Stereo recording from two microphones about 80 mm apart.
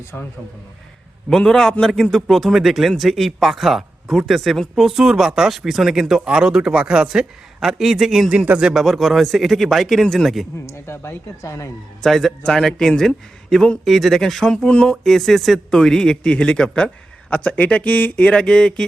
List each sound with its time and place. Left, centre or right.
1.3 s speech: centre
10.7 s speech: left
12.0 s speech: centre